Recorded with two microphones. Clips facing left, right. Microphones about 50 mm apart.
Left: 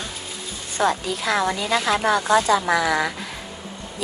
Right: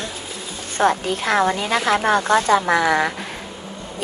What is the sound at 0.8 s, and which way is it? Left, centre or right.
A woman's voice, right.